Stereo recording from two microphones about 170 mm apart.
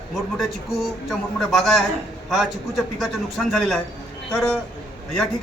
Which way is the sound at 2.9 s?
Centre (ahead or behind).